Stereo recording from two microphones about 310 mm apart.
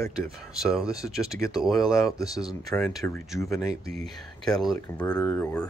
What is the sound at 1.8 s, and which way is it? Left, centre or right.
Speech, centre.